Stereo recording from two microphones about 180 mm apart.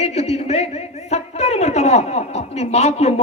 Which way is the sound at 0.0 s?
35° left (ahead or behind).